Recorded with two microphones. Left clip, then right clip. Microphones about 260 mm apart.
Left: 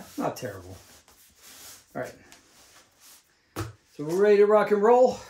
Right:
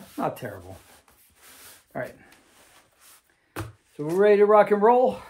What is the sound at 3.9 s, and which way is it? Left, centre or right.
Speech, centre.